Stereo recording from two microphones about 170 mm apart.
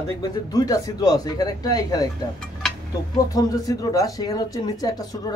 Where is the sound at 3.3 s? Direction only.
20° left (ahead or behind).